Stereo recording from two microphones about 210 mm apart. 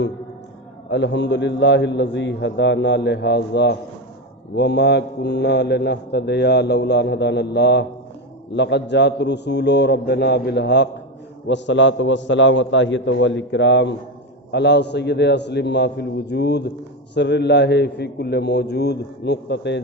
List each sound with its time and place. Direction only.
0.9 s a man's voice: 55° left (ahead or behind)